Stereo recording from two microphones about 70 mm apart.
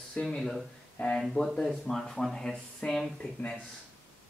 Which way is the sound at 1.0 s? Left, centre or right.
Left.